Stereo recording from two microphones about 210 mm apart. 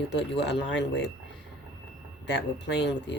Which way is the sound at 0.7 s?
60° left (ahead or behind).